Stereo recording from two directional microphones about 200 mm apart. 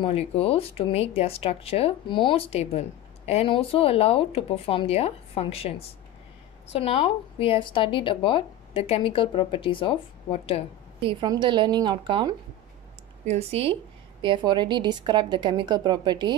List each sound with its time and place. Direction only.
0.0 s a woman's voice: 30° left (ahead or behind)
11.0 s speech: 25° right (ahead or behind)